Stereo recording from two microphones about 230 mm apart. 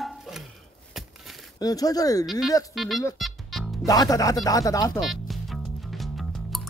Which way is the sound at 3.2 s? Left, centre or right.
Centre.